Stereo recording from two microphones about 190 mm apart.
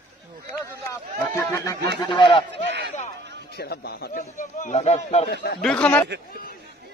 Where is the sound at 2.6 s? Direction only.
65° right (ahead or behind).